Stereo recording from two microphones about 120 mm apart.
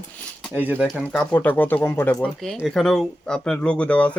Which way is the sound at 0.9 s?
10° left (ahead or behind).